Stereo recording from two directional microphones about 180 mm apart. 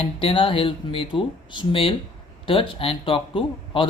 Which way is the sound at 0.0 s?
30° left (ahead or behind).